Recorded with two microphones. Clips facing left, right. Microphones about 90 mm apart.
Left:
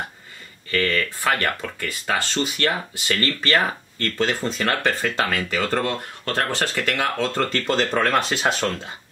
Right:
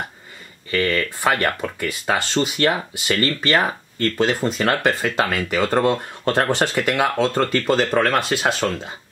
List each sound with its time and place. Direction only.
0.7 s speech: 20° right (ahead or behind); by 8.8 s 5° right (ahead or behind)